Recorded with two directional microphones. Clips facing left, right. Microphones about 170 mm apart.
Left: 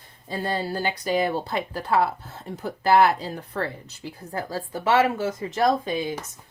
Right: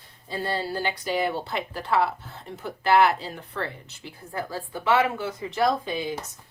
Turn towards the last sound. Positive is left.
turn(degrees=50)  # may be behind; listen again after turning